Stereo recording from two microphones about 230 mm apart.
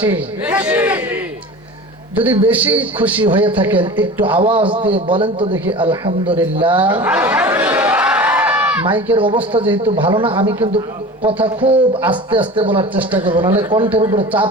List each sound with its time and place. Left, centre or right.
0.0 s a man's voice: centre
2.5 s a man's voice: centre
3.2 s a man's voice: right
3.5 s a man's voice: centre
4.4 s a man's voice: right
7.0 s a man's voice: centre
7.5 s a sound: centre
8.8 s a man's voice: right
12.9 s a man's voice: centre
13.2 s a man's voice: right